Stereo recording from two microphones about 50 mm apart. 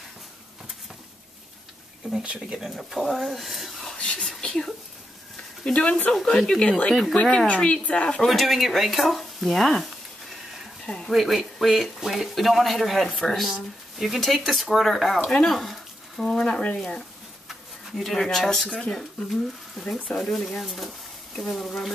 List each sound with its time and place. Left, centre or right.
2.2 s speech: centre
2.7 s speech: centre
3.9 s speech: centre
5.7 s speech: left
6.2 s speech: centre
7.4 s speech: left
8.3 s speech: centre
11.1 s speech: centre
15.1 s speech: centre
15.4 s speech: centre
16.5 s speech: centre
17.5 s bee: centre
18.1 s speech: centre